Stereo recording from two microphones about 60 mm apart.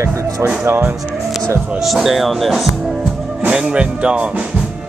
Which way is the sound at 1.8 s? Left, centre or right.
Centre.